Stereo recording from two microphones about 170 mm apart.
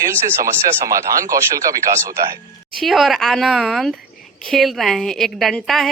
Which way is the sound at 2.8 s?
Centre (ahead or behind).